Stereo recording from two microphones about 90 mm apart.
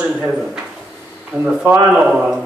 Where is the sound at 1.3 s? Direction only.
30° right (ahead or behind).